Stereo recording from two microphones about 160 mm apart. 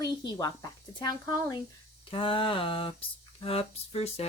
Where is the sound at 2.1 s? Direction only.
30° left (ahead or behind).